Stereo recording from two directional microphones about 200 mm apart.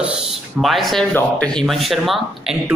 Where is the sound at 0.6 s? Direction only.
Centre (ahead or behind).